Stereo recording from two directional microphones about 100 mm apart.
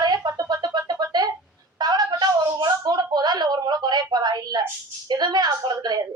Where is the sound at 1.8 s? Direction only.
45° right (ahead or behind).